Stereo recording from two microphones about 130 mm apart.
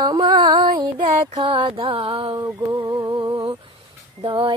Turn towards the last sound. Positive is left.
turn(degrees=-45)  # may be behind; listen again after turning